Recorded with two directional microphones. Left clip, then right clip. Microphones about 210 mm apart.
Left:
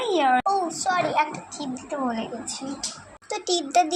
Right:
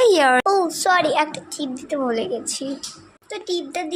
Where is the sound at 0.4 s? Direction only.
50° right (ahead or behind).